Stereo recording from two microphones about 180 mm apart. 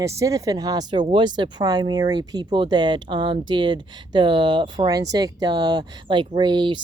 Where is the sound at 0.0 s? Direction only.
15° right (ahead or behind).